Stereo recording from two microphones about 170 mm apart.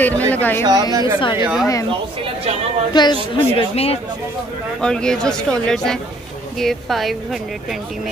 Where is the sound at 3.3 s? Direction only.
35° left (ahead or behind).